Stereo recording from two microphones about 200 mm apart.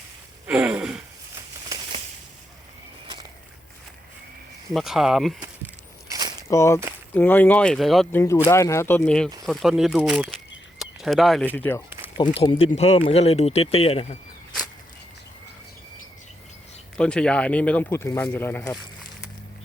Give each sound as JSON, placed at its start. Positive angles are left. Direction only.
{"t": 0.4, "sound": "a sound", "side_deg": -10}
{"t": 4.7, "sound": "speech", "side_deg": 0}
{"t": 5.6, "sound": "a sound", "side_deg": -20}
{"t": 6.5, "sound": "speech", "side_deg": 15}
{"t": 8.4, "sound": "speech", "side_deg": 15}
{"t": 12.4, "sound": "speech", "side_deg": 30}
{"t": 17.0, "sound": "speech", "side_deg": 5}